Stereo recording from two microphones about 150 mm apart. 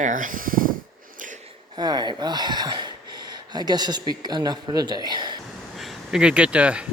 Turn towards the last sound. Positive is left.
turn(degrees=-10)  # may be behind; listen again after turning